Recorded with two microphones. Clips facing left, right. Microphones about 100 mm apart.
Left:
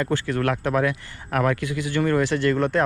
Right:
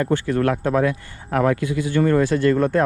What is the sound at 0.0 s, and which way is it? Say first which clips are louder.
A man's voice: right 4 dB; 25° right (ahead or behind).